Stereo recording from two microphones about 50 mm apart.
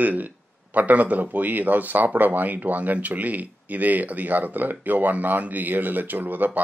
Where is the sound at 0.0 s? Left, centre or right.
Right.